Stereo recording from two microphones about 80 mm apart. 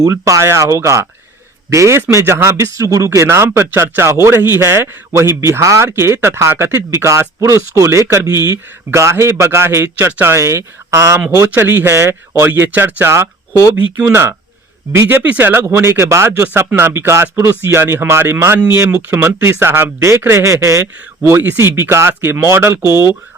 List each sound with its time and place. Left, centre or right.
0.0 s speech: right
11.3 s speech: right
15.0 s speech: centre